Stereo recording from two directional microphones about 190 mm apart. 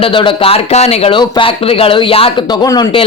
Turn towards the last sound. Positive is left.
turn(degrees=25)  # may be behind; listen again after turning